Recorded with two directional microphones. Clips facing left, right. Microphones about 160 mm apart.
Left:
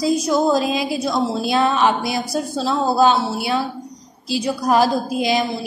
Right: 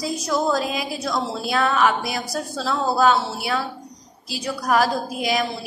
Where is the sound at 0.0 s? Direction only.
25° left (ahead or behind).